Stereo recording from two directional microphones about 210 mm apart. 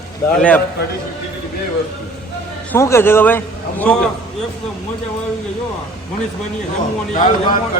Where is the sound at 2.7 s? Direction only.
15° left (ahead or behind).